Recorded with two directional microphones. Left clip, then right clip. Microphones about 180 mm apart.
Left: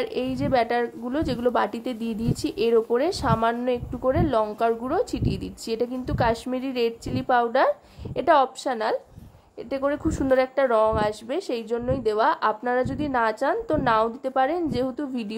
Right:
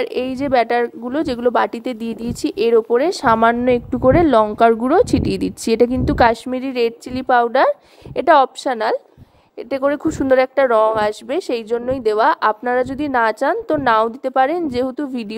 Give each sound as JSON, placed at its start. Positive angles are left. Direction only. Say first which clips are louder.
{"t": 0.0, "sound": "a woman's voice", "louder": "right 6 dB", "side_deg": -45}